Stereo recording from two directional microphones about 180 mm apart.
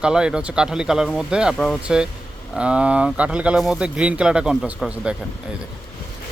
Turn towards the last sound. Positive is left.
turn(degrees=-5)  # may be behind; listen again after turning